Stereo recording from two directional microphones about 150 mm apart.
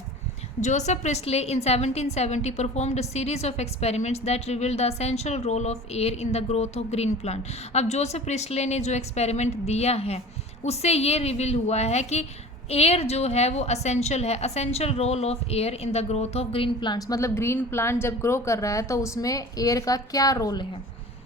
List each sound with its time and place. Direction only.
0.6 s a woman's voice: 50° left (ahead or behind); by 20.7 s 25° left (ahead or behind)